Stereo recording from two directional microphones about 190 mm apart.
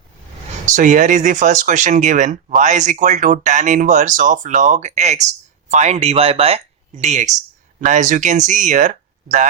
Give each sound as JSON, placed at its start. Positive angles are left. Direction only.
{"t": 0.6, "sound": "speech", "side_deg": -40}